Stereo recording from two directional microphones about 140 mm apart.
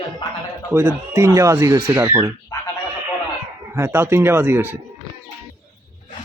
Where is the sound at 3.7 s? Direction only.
15° right (ahead or behind).